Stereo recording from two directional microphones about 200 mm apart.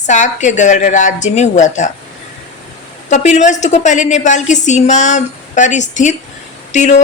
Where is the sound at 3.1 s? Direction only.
35° left (ahead or behind).